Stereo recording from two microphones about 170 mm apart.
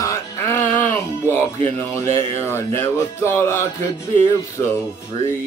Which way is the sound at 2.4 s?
15° left (ahead or behind).